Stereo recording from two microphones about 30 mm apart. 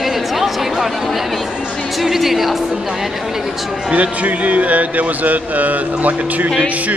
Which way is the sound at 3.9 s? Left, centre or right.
Right.